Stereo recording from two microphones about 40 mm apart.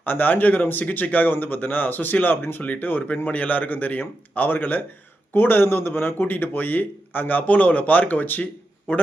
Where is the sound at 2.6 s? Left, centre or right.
Left.